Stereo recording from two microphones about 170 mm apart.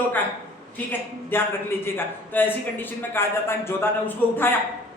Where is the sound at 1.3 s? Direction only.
15° left (ahead or behind).